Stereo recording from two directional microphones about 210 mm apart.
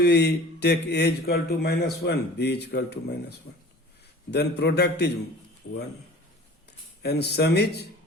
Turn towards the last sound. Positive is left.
turn(degrees=50)  # may be behind; listen again after turning